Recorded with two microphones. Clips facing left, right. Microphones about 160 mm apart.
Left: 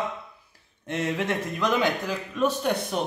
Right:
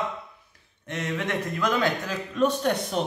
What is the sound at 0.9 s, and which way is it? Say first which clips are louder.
Speech: left 2 dB; 30° left (ahead or behind).